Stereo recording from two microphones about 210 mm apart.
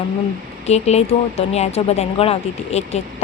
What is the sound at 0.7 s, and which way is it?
Speech, 30° left (ahead or behind).